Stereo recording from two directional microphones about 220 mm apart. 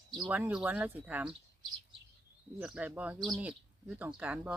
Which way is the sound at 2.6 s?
5° right (ahead or behind).